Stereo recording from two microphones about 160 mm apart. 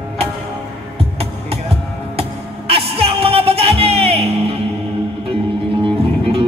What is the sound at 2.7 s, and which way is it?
Music, 35° right (ahead or behind).